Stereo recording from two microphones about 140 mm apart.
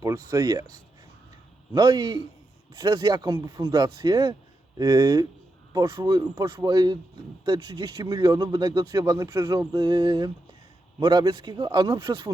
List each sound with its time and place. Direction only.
0.0 s speech: 25° right (ahead or behind)